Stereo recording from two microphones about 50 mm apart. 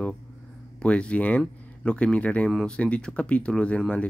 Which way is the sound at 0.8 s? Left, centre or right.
Left.